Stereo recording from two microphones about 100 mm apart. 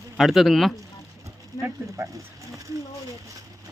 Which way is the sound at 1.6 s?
30° right (ahead or behind).